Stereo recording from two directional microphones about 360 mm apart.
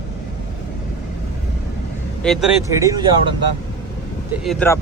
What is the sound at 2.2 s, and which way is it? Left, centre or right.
Speech, centre.